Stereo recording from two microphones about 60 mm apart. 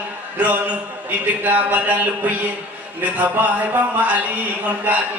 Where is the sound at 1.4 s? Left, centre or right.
Right.